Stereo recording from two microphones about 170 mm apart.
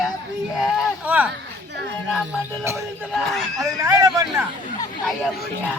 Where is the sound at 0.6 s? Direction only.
5° right (ahead or behind).